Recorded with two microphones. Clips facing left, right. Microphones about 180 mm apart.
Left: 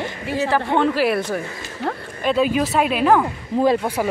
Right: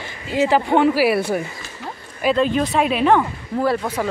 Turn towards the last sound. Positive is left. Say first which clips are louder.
# left 2 dB
turn(degrees=15)  # may be behind; listen again after turning